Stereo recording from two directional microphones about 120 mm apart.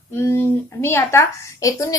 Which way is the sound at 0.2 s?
20° left (ahead or behind).